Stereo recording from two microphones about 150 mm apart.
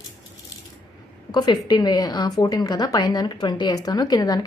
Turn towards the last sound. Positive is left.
turn(degrees=25)  # may be behind; listen again after turning